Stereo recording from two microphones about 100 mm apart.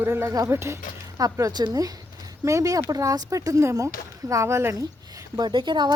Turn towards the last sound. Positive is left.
turn(degrees=-50)  # may be behind; listen again after turning